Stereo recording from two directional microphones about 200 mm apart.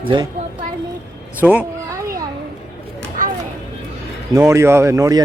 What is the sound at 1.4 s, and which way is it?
Speech, 10° right (ahead or behind).